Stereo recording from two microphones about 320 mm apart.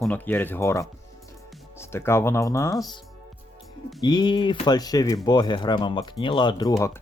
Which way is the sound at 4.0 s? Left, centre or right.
Centre.